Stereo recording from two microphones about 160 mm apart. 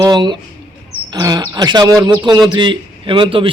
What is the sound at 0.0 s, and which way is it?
A man's voice, 25° right (ahead or behind).